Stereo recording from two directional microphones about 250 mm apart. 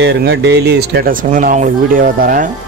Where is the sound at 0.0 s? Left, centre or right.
Right.